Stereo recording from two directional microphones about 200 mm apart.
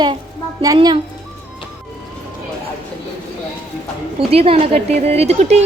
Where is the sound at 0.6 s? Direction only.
20° right (ahead or behind).